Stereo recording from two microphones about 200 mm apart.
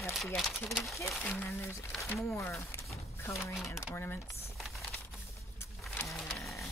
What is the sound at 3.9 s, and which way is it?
Speech, 10° left (ahead or behind).